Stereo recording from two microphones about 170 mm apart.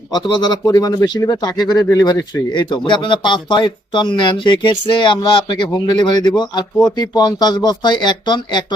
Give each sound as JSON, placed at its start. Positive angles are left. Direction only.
{"t": 0.1, "sound": "speech", "side_deg": 25}